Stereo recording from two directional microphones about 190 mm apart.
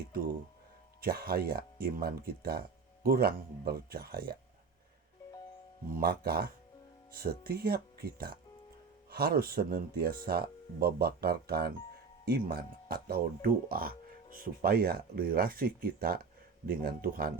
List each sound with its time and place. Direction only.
1.0 s speech: 55° right (ahead or behind)
5.9 s speech: 50° right (ahead or behind)